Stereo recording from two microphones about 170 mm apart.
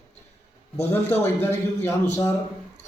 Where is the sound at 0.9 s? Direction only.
10° left (ahead or behind).